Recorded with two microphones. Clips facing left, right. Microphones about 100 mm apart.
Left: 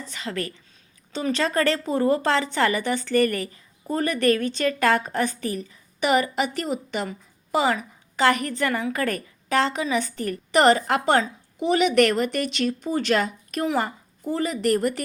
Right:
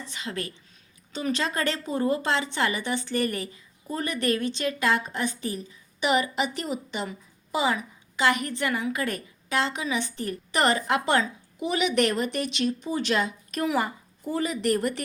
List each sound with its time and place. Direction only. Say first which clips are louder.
0.1 s a woman's voice: left 4 dB; 40° left (ahead or behind)